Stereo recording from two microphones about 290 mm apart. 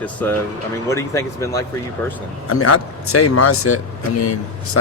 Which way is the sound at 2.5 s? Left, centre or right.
Left.